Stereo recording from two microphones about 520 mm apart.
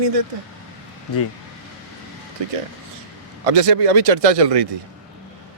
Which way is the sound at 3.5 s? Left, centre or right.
Right.